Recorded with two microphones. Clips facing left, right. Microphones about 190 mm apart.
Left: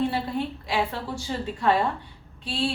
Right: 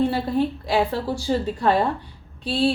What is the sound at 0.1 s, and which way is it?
A woman's voice, 35° right (ahead or behind).